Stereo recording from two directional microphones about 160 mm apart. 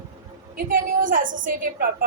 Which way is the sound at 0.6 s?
60° right (ahead or behind).